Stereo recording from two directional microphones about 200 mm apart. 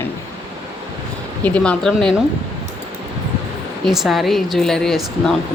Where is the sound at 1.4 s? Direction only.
5° left (ahead or behind).